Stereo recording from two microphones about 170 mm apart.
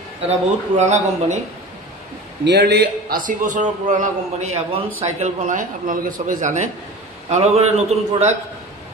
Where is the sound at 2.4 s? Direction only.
75° right (ahead or behind).